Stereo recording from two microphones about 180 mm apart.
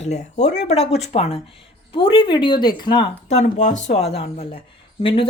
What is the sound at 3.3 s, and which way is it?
A woman's voice, 40° left (ahead or behind).